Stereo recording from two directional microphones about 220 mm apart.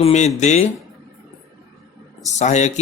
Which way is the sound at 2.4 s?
30° left (ahead or behind).